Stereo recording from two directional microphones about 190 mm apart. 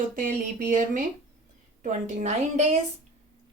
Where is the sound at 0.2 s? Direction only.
45° right (ahead or behind).